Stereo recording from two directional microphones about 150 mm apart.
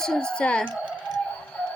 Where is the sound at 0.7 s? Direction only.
5° right (ahead or behind).